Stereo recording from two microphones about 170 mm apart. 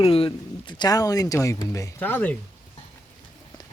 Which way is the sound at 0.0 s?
35° left (ahead or behind).